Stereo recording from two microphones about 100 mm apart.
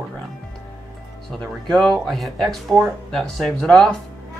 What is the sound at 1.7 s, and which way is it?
Speech, 5° left (ahead or behind).